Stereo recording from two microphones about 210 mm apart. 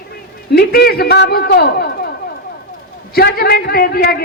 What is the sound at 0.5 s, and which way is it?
A man's voice, 50° left (ahead or behind).